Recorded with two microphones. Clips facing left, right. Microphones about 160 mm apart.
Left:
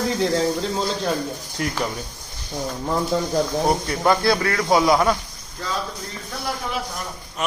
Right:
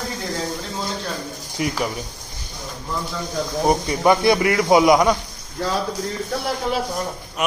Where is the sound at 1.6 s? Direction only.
5° right (ahead or behind).